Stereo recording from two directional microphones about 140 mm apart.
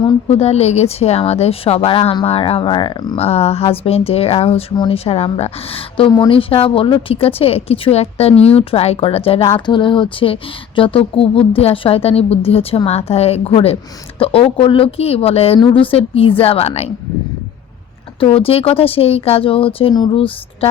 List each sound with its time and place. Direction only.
0.0 s speech: 50° left (ahead or behind); by 3.2 s 30° left (ahead or behind)
3.2 s speech: 45° left (ahead or behind)
18.2 s speech: 40° left (ahead or behind)